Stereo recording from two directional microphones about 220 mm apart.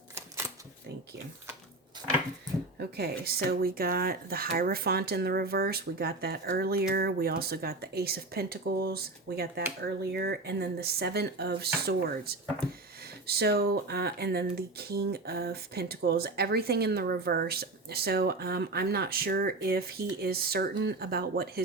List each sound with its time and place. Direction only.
2.7 s speech: 45° right (ahead or behind)